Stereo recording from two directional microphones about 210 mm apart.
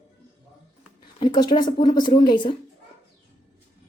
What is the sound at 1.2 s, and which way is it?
A woman's voice, 20° left (ahead or behind).